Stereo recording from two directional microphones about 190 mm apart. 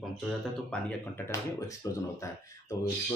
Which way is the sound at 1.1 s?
15° left (ahead or behind).